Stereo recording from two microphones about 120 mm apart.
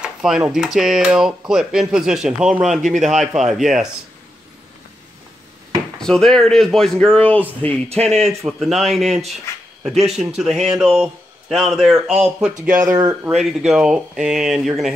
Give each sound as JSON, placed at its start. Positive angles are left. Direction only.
{"t": 0.0, "sound": "speech", "side_deg": -5}
{"t": 5.9, "sound": "speech", "side_deg": 5}
{"t": 7.9, "sound": "speech", "side_deg": -60}
{"t": 8.2, "sound": "speech", "side_deg": 0}
{"t": 12.8, "sound": "speech", "side_deg": -30}
{"t": 13.3, "sound": "speech", "side_deg": 0}